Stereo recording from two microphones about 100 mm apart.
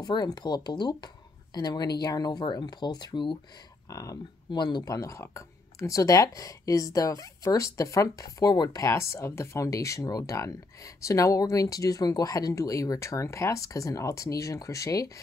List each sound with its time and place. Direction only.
0.0 s speech: 45° left (ahead or behind)
3.9 s speech: 35° left (ahead or behind)
4.5 s speech: 50° left (ahead or behind)